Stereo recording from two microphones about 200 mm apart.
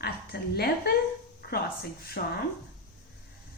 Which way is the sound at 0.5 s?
50° left (ahead or behind).